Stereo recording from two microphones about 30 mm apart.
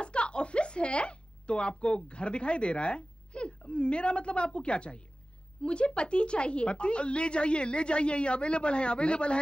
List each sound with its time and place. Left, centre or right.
0.0 s a woman's voice: left